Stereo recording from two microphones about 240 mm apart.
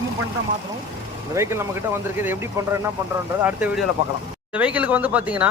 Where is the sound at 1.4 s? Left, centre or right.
Centre.